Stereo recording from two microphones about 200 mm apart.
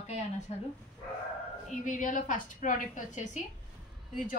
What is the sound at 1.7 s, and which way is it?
A woman's voice, 40° left (ahead or behind).